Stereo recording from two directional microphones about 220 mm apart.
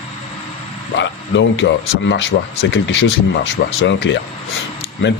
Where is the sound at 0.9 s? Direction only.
55° left (ahead or behind).